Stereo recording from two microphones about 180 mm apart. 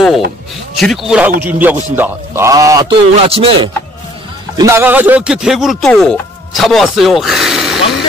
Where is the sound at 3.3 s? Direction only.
30° right (ahead or behind).